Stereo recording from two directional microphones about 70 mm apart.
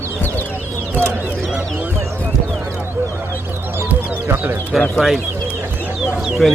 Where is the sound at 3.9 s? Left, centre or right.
Right.